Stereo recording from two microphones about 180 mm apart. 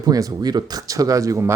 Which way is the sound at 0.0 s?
20° right (ahead or behind).